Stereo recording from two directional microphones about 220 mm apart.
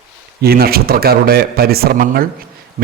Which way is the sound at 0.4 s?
45° right (ahead or behind).